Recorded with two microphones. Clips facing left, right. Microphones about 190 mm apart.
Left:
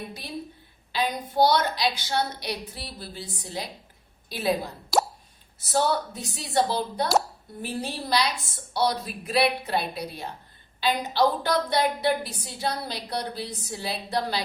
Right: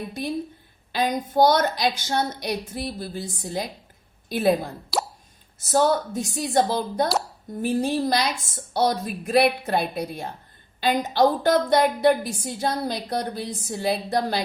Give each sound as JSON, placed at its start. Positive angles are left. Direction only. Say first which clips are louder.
{"t": 0.9, "sound": "a woman's voice", "louder": "right 3 dB", "side_deg": -45}
{"t": 4.9, "sound": "plop", "louder": "left 3 dB", "side_deg": 45}
{"t": 5.5, "sound": "a woman's voice", "louder": "right 4 dB", "side_deg": -45}